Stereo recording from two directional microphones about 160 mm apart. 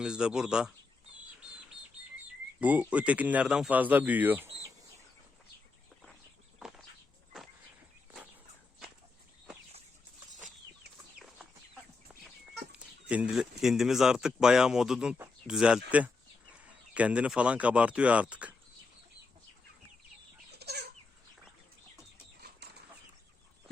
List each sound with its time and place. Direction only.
0.0 s speech: 5° right (ahead or behind)
2.6 s speech: 10° right (ahead or behind)
11.2 s chicken: 5° right (ahead or behind)
12.7 s speech: 10° right (ahead or behind)
20.5 s chicken: 90° right
22.6 s chicken: 90° right